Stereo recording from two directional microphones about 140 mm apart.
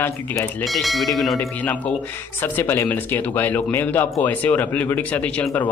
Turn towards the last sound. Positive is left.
turn(degrees=10)  # may be behind; listen again after turning